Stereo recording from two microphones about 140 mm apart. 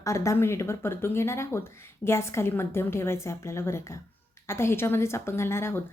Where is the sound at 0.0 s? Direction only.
20° left (ahead or behind).